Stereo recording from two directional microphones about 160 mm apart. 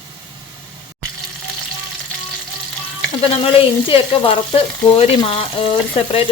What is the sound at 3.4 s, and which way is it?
Frying, 35° left (ahead or behind).